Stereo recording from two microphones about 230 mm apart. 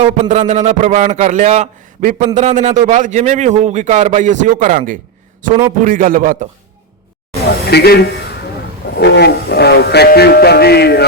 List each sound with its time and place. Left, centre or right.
0.0 s a man's voice: right
7.7 s music: left